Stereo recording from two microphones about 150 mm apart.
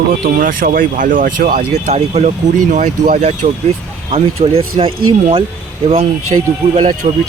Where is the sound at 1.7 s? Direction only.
50° right (ahead or behind).